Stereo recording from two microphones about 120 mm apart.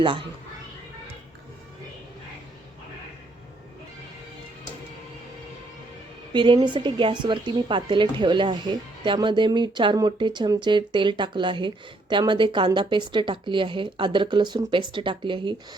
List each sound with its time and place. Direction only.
6.3 s a woman's voice: 40° right (ahead or behind)